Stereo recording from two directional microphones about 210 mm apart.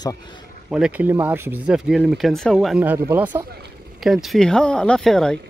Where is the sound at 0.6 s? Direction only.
5° right (ahead or behind).